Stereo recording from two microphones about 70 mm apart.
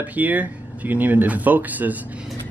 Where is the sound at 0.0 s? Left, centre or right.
Right.